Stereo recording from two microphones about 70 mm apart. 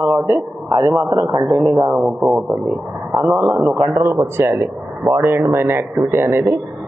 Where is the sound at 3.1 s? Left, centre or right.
Right.